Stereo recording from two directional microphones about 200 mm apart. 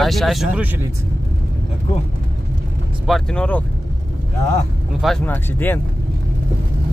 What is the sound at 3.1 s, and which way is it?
Speech, 5° left (ahead or behind).